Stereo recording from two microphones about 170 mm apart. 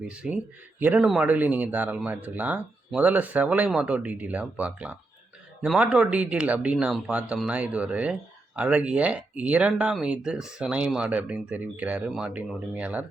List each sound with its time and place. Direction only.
0.1 s speech: 5° right (ahead or behind)